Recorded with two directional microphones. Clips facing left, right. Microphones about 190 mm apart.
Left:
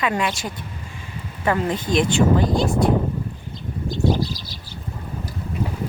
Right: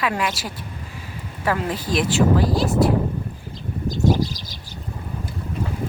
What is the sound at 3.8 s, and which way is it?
Bird, 40° right (ahead or behind).